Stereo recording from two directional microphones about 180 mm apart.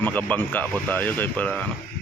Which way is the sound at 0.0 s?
10° left (ahead or behind).